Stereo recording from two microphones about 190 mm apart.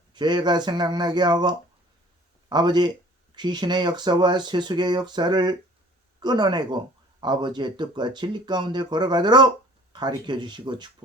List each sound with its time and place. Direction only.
0.1 s speech: 25° right (ahead or behind)